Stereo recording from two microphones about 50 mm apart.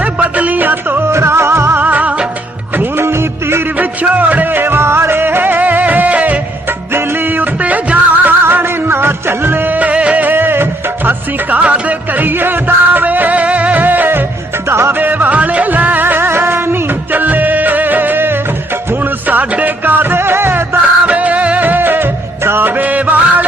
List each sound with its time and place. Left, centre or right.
0.0 s music: right
1.0 s music: right
1.8 s music: right
2.7 s music: right
3.8 s music: right
6.7 s music: right
10.3 s music: right
12.2 s music: right
14.7 s music: right
14.9 s music: right
19.8 s music: right
21.1 s music: right